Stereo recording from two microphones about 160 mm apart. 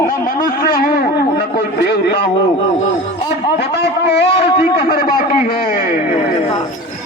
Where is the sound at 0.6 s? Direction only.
65° left (ahead or behind).